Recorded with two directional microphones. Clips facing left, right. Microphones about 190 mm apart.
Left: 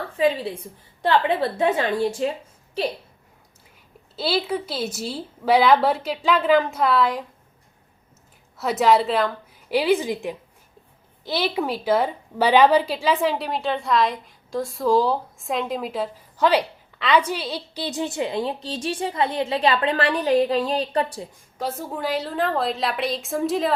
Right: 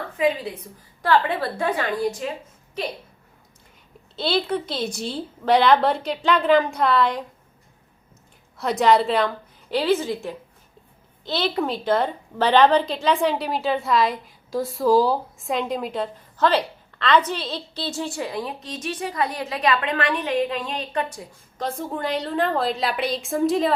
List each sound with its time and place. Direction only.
0.1 s a woman's voice: 30° left (ahead or behind)
4.1 s a woman's voice: 5° left (ahead or behind)
8.5 s a woman's voice: 5° left (ahead or behind); by 21.2 s 30° left (ahead or behind)
21.6 s a woman's voice: 5° left (ahead or behind)